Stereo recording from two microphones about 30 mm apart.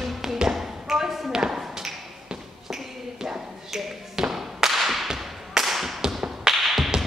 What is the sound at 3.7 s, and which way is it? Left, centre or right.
Tap, centre.